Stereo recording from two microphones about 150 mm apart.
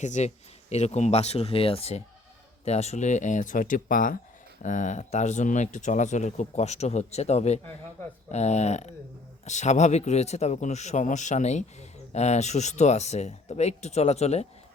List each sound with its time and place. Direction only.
0.0 s speech: 55° left (ahead or behind)